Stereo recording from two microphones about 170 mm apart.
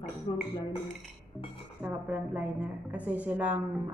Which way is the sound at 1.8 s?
10° right (ahead or behind).